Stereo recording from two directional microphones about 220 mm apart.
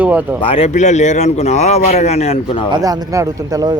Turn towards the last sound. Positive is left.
turn(degrees=-15)  # may be behind; listen again after turning